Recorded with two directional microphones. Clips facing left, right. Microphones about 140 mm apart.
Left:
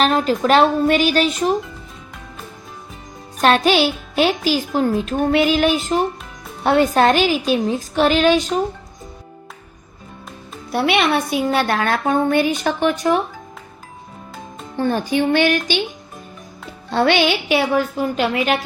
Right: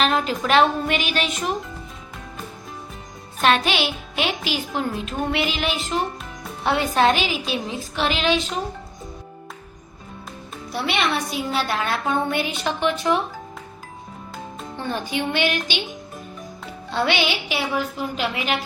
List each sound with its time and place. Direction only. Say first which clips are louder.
0.0 s a woman's voice: left 5 dB; 40° left (ahead or behind)
3.4 s a woman's voice: left 5 dB; 40° left (ahead or behind)
10.7 s a woman's voice: left 6 dB; 60° left (ahead or behind); by 13.1 s 45° left (ahead or behind)
14.8 s a woman's voice: left 8 dB; 45° left (ahead or behind)
16.9 s a woman's voice: left 6 dB; 45° left (ahead or behind)